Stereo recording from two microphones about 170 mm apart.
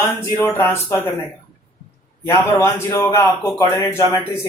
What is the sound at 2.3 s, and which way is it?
A man's voice, 15° left (ahead or behind).